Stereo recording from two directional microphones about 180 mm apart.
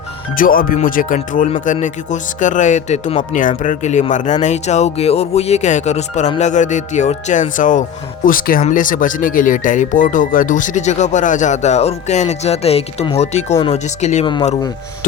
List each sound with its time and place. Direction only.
0.3 s speech: 50° left (ahead or behind)